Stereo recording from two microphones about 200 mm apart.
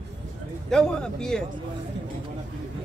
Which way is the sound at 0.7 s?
5° left (ahead or behind).